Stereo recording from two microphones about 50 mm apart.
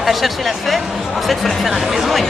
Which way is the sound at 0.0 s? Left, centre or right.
Centre.